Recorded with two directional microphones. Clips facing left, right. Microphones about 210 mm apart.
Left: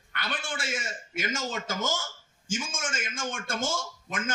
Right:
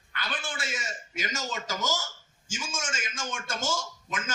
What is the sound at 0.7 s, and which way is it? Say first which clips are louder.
A man's voice: left 2 dB; 50° left (ahead or behind).